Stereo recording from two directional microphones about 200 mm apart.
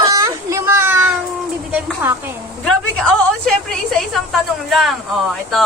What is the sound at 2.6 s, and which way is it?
A woman's voice, 5° left (ahead or behind).